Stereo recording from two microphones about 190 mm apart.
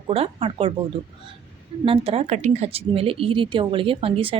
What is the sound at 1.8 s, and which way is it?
A woman's voice, 30° right (ahead or behind).